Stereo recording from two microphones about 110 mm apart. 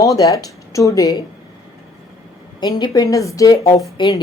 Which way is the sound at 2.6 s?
40° left (ahead or behind).